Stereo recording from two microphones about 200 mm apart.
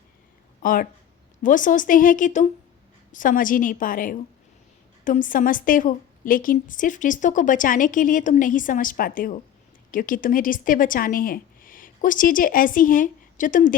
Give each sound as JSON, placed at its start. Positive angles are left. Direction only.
{"t": 0.6, "sound": "a woman's voice", "side_deg": 45}